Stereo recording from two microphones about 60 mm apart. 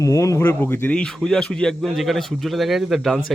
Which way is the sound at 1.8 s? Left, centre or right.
Centre.